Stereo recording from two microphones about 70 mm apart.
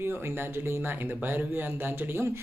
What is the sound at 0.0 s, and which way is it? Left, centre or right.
Speech, right.